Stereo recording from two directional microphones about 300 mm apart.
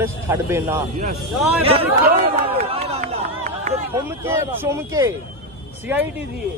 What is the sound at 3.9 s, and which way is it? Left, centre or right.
A man's voice, centre.